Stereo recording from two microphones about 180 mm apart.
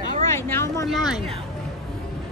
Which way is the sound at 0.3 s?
15° left (ahead or behind).